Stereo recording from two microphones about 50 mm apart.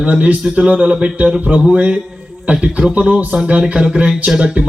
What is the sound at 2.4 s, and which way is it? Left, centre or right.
A man's voice, right.